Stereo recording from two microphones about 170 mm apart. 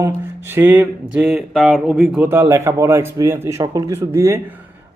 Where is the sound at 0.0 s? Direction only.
15° right (ahead or behind).